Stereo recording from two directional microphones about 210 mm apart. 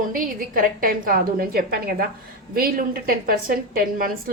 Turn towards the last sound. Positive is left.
turn(degrees=-45)  # may be behind; listen again after turning